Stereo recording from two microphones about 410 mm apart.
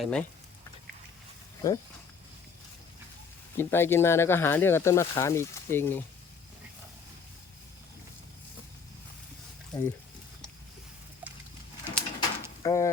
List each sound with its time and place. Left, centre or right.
0.0 s speech: centre
1.6 s speech: centre
3.6 s speech: centre
11.9 s a sound: centre
12.6 s speech: centre